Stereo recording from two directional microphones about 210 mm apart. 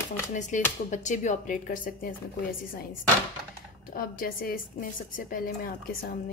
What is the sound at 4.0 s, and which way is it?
Speech, 45° left (ahead or behind).